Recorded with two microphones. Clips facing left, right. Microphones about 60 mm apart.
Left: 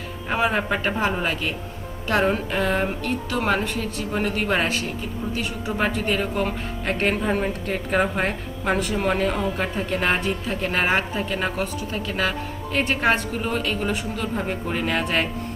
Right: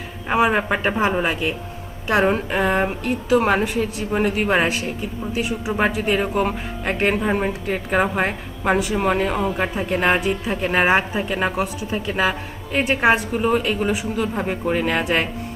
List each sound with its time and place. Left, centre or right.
0.3 s a woman's voice: centre